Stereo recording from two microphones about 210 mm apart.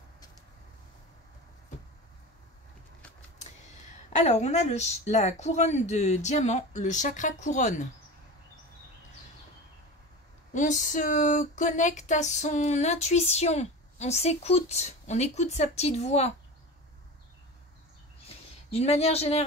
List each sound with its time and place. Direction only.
4.1 s speech: 35° left (ahead or behind)
10.5 s speech: 35° left (ahead or behind)
18.7 s speech: 30° left (ahead or behind)